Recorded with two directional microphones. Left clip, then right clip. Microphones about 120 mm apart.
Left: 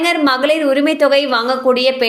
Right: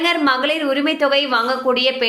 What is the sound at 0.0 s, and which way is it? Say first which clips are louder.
A woman's voice: left 3 dB; 35° left (ahead or behind).